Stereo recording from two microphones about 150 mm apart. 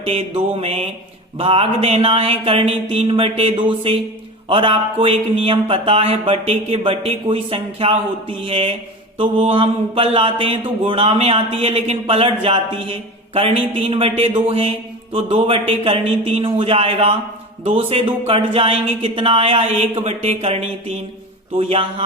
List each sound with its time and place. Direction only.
0.0 s a man's voice: 40° right (ahead or behind)